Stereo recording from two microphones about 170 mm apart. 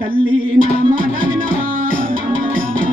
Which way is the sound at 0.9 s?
55° right (ahead or behind).